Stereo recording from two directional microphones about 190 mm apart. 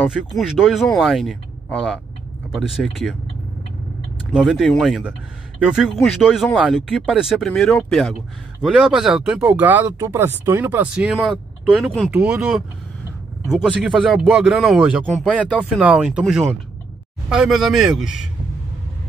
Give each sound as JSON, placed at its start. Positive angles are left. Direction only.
{"t": 0.0, "sound": "speech", "side_deg": 0}
{"t": 4.3, "sound": "speech", "side_deg": 0}
{"t": 6.2, "sound": "speech", "side_deg": 0}